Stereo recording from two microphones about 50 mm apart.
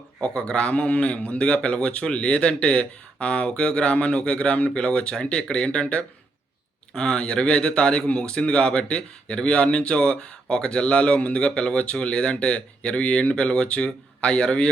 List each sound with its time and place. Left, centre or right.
0.2 s speech: centre